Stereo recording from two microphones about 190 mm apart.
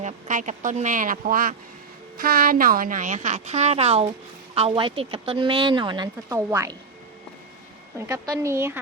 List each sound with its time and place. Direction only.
0.0 s a woman's voice: 40° right (ahead or behind); by 6.1 s 25° right (ahead or behind)
6.2 s speech: 15° right (ahead or behind)
7.9 s speech: 15° right (ahead or behind)